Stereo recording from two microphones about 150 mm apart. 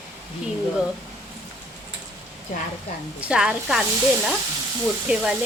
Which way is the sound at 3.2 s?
5° right (ahead or behind).